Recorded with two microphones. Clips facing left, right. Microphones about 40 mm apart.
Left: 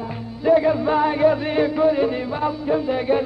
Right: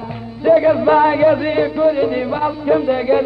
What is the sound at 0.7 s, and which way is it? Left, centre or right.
Music, right.